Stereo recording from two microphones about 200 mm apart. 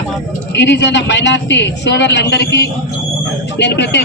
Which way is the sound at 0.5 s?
60° left (ahead or behind).